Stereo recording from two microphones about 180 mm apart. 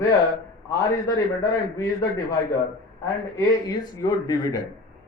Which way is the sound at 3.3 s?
20° left (ahead or behind).